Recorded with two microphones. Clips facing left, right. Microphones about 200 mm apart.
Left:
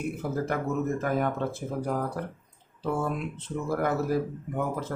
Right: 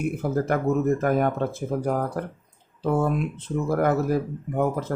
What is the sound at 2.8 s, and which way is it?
Speech, 50° right (ahead or behind).